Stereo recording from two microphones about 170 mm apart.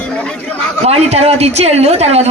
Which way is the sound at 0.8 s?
40° right (ahead or behind).